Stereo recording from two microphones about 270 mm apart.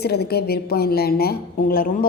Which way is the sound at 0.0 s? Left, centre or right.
Left.